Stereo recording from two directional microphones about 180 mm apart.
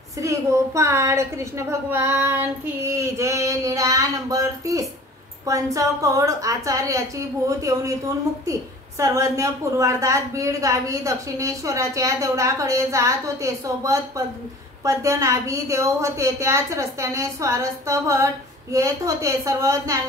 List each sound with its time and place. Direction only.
0.2 s a woman's voice: 15° right (ahead or behind)